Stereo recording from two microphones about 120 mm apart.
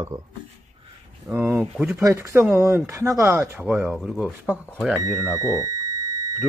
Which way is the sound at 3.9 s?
10° left (ahead or behind).